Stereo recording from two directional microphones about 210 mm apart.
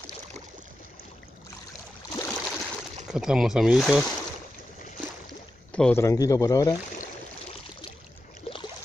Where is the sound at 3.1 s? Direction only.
5° right (ahead or behind).